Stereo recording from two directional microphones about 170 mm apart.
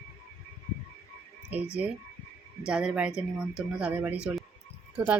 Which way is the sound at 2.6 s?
5° right (ahead or behind).